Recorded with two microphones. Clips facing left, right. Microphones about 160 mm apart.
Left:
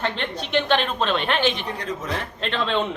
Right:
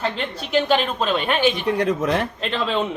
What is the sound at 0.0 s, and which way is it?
Speech, 5° right (ahead or behind).